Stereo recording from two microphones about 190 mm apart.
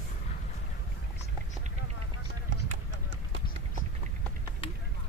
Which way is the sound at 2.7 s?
80° right.